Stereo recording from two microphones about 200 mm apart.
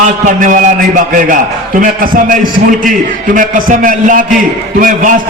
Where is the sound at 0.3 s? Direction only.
40° right (ahead or behind).